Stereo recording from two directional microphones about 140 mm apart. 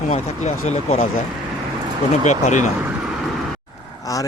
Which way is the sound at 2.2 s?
60° left (ahead or behind).